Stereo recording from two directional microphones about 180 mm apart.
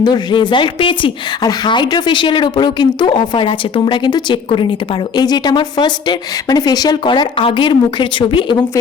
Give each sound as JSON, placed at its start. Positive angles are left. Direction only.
{"t": 0.0, "sound": "speech", "side_deg": 25}